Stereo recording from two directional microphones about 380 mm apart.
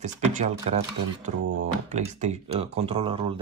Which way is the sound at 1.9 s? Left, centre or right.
Centre.